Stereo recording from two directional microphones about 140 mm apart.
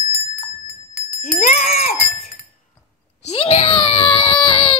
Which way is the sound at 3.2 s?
45° left (ahead or behind).